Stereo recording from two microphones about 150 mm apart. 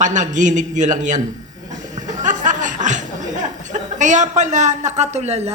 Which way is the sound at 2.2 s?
55° right (ahead or behind).